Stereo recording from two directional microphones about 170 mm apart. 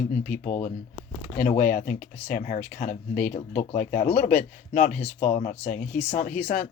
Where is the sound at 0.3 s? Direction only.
45° left (ahead or behind).